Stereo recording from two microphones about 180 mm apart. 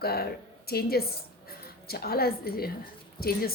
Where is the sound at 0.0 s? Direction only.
60° left (ahead or behind).